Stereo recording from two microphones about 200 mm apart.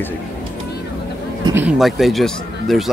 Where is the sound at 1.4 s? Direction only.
10° right (ahead or behind).